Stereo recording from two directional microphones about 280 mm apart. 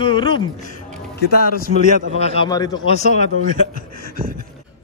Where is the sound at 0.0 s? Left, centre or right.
Centre.